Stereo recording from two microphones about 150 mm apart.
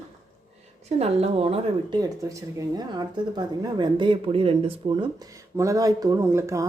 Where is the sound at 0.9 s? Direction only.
45° right (ahead or behind).